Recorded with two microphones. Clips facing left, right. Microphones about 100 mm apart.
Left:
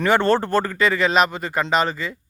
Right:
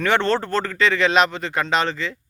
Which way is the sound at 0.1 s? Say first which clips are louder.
Left 3 dB; 15° left (ahead or behind).